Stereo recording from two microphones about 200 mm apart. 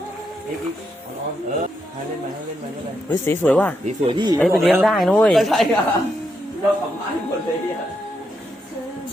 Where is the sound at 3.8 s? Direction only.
25° right (ahead or behind).